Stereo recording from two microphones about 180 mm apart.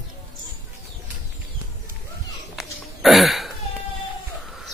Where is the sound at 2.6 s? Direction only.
Centre (ahead or behind).